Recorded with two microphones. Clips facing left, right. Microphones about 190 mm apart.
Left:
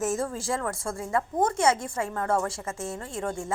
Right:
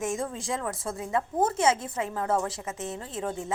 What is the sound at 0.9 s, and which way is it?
Speech, 20° right (ahead or behind).